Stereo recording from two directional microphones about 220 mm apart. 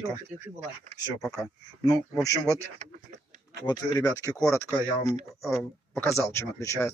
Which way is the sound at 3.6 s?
20° left (ahead or behind).